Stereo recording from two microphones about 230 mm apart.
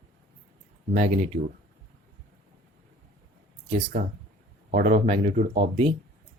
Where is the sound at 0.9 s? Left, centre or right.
Right.